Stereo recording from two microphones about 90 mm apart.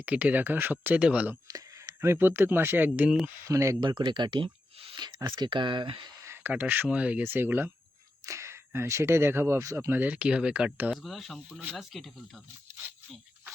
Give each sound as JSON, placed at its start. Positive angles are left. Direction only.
{"t": 0.0, "sound": "speech", "side_deg": -15}
{"t": 1.5, "sound": "a sound", "side_deg": -45}
{"t": 2.0, "sound": "speech", "side_deg": -25}
{"t": 3.2, "sound": "speech", "side_deg": -30}
{"t": 3.8, "sound": "speech", "side_deg": -60}
{"t": 4.9, "sound": "speech", "side_deg": -55}
{"t": 6.2, "sound": "a sound", "side_deg": -25}
{"t": 6.5, "sound": "speech", "side_deg": -20}
{"t": 7.3, "sound": "speech", "side_deg": -25}
{"t": 10.9, "sound": "speech", "side_deg": 0}